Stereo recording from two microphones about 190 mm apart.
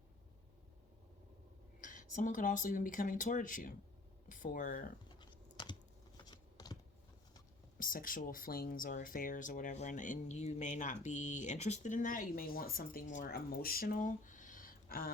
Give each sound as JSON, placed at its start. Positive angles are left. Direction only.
{"t": 1.8, "sound": "speech", "side_deg": 45}
{"t": 6.1, "sound": "a sound", "side_deg": 20}
{"t": 7.8, "sound": "speech", "side_deg": 45}